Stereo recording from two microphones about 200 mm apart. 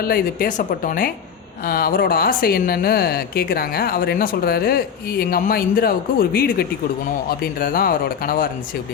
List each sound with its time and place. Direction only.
0.1 s speech: 45° left (ahead or behind)